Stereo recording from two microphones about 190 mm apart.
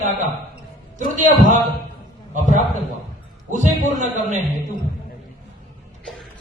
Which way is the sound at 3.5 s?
40° right (ahead or behind).